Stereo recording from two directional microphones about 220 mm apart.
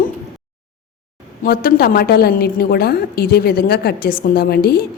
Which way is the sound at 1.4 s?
40° left (ahead or behind).